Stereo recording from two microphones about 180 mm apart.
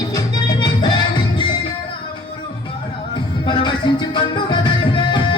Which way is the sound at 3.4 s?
25° left (ahead or behind).